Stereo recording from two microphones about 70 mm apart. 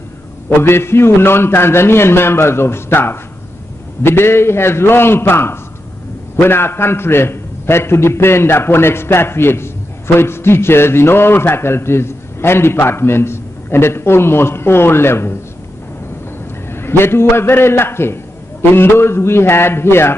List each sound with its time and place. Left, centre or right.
0.6 s a man's voice: left
16.6 s a man's voice: left